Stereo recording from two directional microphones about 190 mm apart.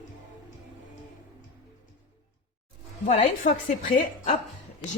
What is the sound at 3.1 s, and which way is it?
A woman's voice, 40° left (ahead or behind).